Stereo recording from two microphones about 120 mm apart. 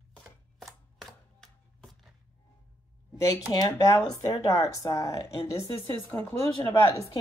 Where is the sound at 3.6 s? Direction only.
30° left (ahead or behind).